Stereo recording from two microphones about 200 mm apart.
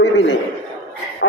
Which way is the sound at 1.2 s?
70° left (ahead or behind).